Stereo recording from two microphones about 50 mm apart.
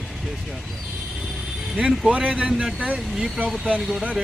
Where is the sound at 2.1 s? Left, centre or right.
Right.